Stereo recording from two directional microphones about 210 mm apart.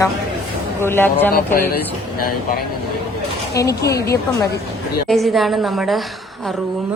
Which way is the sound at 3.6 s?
15° left (ahead or behind).